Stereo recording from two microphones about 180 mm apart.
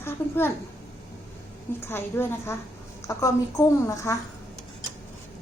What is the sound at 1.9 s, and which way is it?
A woman's voice, 10° left (ahead or behind).